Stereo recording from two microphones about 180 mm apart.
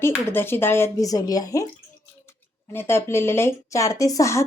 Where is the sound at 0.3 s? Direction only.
15° left (ahead or behind).